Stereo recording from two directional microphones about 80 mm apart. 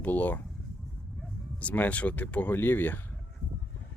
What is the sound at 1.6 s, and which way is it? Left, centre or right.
Speech, centre.